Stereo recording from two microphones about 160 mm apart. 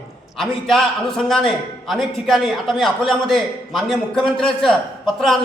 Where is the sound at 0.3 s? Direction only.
Centre (ahead or behind).